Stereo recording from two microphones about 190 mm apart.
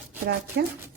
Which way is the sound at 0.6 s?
60° right (ahead or behind).